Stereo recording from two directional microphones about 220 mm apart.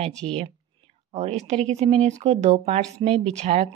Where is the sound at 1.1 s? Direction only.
30° right (ahead or behind).